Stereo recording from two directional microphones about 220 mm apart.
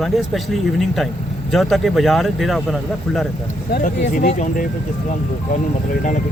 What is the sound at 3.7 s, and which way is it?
Speech, 35° left (ahead or behind).